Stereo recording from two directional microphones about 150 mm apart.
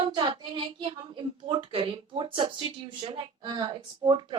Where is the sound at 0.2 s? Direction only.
35° right (ahead or behind).